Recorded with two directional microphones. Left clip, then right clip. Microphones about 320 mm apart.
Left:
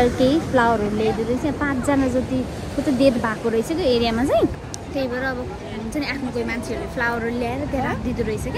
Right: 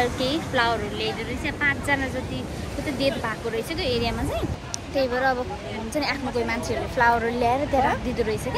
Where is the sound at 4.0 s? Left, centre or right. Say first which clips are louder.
Left 8 dB; left.